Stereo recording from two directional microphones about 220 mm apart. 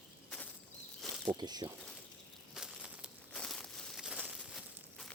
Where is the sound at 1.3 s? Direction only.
20° right (ahead or behind).